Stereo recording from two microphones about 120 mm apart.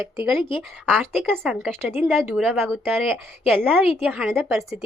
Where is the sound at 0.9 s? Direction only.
10° right (ahead or behind).